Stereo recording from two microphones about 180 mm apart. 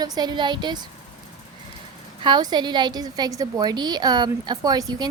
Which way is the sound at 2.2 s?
25° right (ahead or behind).